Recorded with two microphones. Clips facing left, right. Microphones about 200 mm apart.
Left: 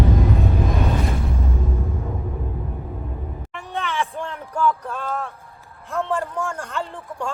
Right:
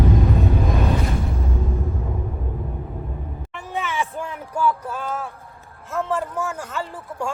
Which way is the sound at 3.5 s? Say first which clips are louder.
Even; centre (ahead or behind).